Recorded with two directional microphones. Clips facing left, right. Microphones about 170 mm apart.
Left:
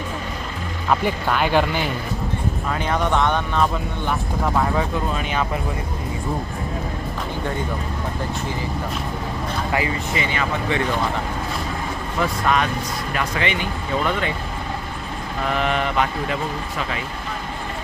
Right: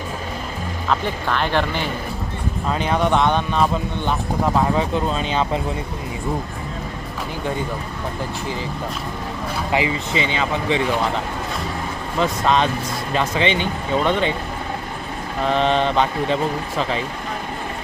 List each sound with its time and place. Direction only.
0.9 s speech: 10° left (ahead or behind)
2.7 s speech: 15° right (ahead or behind)
9.7 s speech: 20° right (ahead or behind)
12.2 s speech: 25° right (ahead or behind)
15.4 s speech: 25° right (ahead or behind)